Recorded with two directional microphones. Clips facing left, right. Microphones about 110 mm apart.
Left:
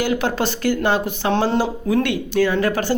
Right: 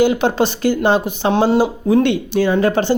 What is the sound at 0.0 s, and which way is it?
Speech, 20° right (ahead or behind).